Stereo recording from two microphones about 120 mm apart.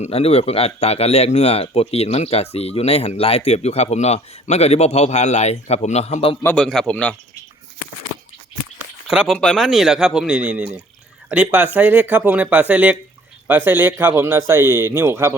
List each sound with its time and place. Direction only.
0.0 s speech: 60° left (ahead or behind)
6.6 s speech: 5° left (ahead or behind)
9.0 s speech: 5° right (ahead or behind); by 15.4 s 20° right (ahead or behind)